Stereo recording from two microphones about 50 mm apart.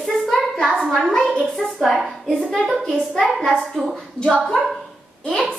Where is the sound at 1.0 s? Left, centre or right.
Centre.